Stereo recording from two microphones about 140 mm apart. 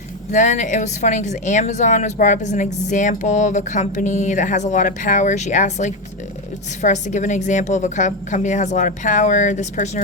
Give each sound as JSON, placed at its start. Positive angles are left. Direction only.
{"t": 0.3, "sound": "a woman's voice", "side_deg": 60}